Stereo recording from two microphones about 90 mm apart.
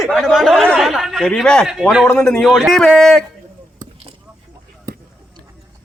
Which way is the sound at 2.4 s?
Centre (ahead or behind).